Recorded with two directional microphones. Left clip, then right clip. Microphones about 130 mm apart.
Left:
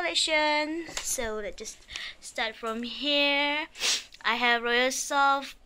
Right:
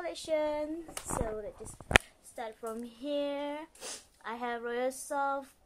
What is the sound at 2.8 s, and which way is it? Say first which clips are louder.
Speech: left 10 dB; centre (ahead or behind).